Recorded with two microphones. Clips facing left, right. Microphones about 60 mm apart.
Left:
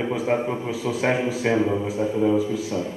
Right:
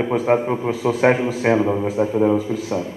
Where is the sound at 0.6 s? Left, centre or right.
Right.